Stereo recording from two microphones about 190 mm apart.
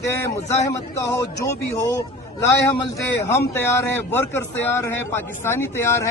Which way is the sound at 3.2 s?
15° left (ahead or behind).